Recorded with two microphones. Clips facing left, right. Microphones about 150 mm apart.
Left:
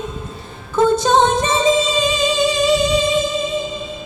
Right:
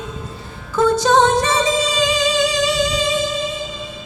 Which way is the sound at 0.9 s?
20° left (ahead or behind).